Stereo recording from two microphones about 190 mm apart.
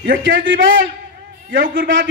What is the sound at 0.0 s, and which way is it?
Speech, 65° right (ahead or behind).